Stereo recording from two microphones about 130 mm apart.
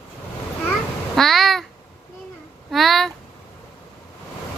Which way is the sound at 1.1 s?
Centre (ahead or behind).